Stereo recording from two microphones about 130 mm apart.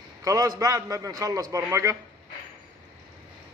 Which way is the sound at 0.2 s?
25° right (ahead or behind).